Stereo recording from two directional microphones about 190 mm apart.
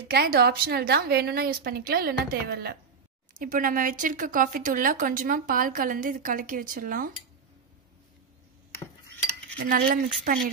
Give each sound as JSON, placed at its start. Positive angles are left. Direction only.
{"t": 0.1, "sound": "a woman's voice", "side_deg": -55}
{"t": 9.6, "sound": "speech", "side_deg": -50}